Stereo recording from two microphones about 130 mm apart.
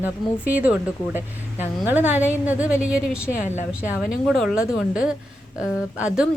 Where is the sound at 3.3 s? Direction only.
70° left (ahead or behind).